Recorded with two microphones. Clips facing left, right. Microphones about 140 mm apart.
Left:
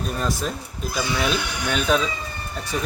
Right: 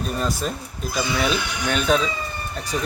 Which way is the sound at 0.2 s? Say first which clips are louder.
Right 1 dB; centre (ahead or behind).